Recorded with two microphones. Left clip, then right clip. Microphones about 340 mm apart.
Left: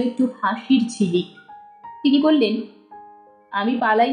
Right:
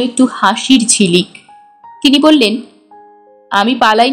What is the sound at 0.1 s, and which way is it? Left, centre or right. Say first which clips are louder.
A woman's voice: right 11 dB; right.